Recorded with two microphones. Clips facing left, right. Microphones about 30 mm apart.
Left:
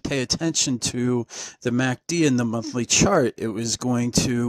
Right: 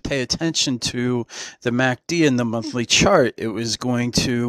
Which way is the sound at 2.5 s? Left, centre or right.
Right.